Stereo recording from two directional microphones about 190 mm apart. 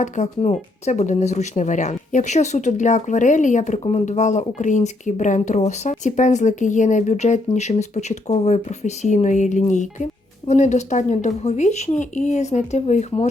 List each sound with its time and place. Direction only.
0.0 s speech: 35° left (ahead or behind)